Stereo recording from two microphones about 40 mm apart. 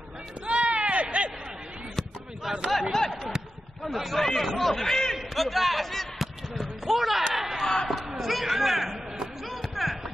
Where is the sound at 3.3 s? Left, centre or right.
Centre.